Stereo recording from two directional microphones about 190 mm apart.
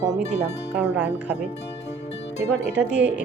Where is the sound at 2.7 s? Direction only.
5° right (ahead or behind).